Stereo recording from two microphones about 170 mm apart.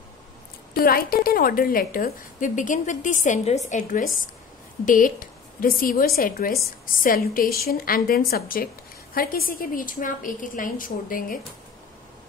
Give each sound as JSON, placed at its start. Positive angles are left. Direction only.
{"t": 0.7, "sound": "a woman's voice", "side_deg": 60}